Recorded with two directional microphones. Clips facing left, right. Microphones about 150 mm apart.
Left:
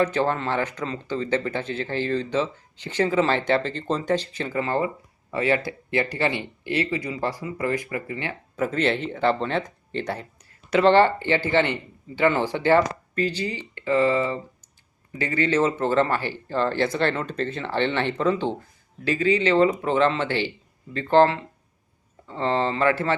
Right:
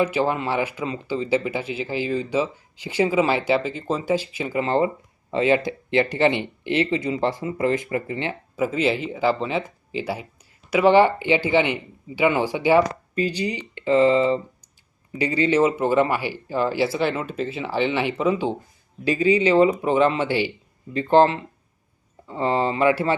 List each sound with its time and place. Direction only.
0.0 s speech: 10° right (ahead or behind)
4.6 s speech: 25° right (ahead or behind)
8.5 s speech: 5° right (ahead or behind)